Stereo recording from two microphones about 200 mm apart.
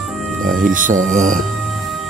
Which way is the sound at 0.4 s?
40° right (ahead or behind).